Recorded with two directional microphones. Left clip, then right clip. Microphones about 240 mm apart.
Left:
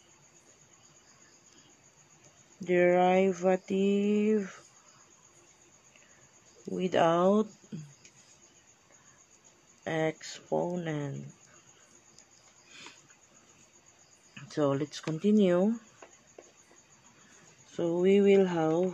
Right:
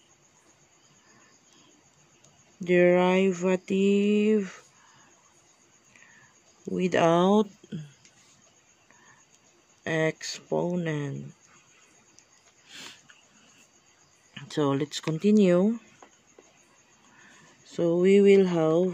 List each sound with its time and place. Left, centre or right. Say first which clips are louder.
2.6 s speech: right 3 dB; right
6.8 s speech: right 3 dB; right
9.8 s speech: right 4 dB; right
14.3 s speech: right 2 dB; right
17.6 s speech: right 4 dB; right